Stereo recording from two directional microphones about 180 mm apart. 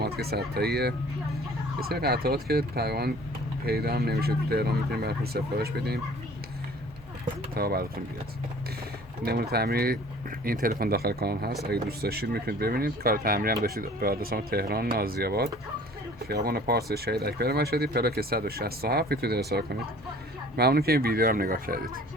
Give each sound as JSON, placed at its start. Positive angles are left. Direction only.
{"t": 0.0, "sound": "speech", "side_deg": -60}
{"t": 7.5, "sound": "speech", "side_deg": -60}
{"t": 9.2, "sound": "speech", "side_deg": -60}